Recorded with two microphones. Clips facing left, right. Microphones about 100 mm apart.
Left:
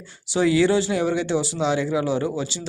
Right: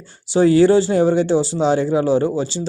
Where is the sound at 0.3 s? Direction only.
40° right (ahead or behind).